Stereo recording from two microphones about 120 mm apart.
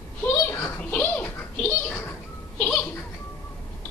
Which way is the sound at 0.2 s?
10° left (ahead or behind).